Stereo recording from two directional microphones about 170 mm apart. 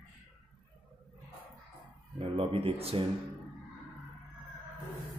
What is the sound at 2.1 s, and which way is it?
Music, 35° right (ahead or behind).